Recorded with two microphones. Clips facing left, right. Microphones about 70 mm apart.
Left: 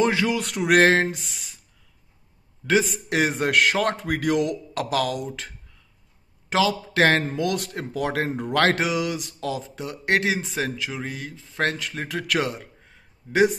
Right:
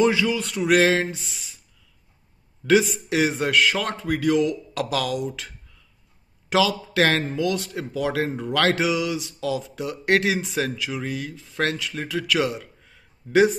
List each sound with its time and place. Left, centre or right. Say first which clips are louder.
0.0 s a sound: right 1 dB; left
0.7 s a man's voice: left 1 dB; left
2.8 s a man's voice: right 1 dB; left
4.7 s a man's voice: left 3 dB; left
6.5 s speech: right 1 dB; left
7.3 s a man's voice: right 1 dB; left
12.8 s a sound: right 1 dB; left